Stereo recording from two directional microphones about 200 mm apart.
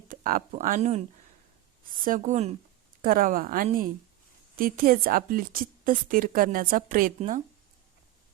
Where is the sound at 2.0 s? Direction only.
40° right (ahead or behind).